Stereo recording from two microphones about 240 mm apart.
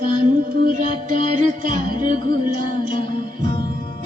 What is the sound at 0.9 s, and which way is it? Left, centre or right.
Music, left.